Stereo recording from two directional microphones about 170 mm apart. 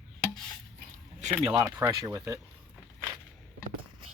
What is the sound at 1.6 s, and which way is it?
Speech, 20° right (ahead or behind).